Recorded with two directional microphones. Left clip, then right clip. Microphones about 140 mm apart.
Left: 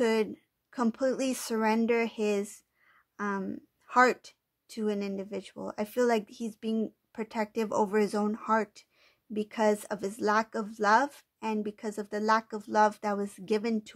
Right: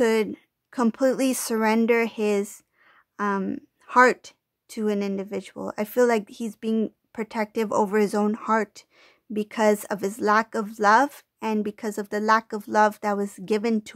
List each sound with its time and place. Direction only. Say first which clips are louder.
0.0 s a woman's voice: right 6 dB; 35° right (ahead or behind)